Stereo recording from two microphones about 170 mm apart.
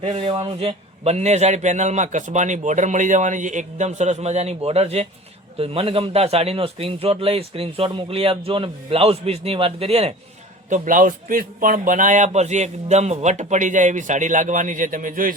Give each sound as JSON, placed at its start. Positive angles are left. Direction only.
{"t": 0.0, "sound": "a man's voice", "side_deg": -35}
{"t": 10.7, "sound": "speech", "side_deg": -50}